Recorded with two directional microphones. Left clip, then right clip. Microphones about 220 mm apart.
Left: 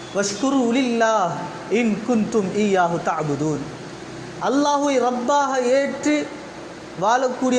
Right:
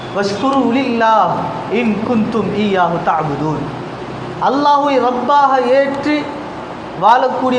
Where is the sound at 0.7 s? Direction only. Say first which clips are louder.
Right 7 dB; 55° left (ahead or behind).